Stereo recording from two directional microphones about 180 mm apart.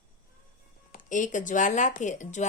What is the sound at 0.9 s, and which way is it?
Speech, 45° left (ahead or behind).